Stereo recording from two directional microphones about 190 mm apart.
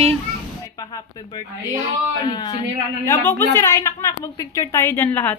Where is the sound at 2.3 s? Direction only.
20° left (ahead or behind).